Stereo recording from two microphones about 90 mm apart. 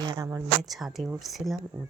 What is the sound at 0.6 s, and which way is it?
Speech, centre (ahead or behind).